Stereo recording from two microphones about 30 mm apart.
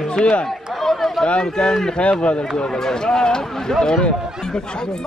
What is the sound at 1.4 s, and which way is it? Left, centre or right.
Speech, left.